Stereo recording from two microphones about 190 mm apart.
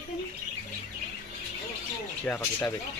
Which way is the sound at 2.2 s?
10° left (ahead or behind).